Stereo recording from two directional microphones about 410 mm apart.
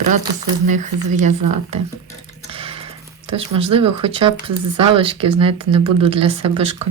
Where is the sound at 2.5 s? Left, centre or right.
Centre.